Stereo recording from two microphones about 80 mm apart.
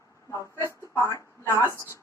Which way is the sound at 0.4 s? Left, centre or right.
Left.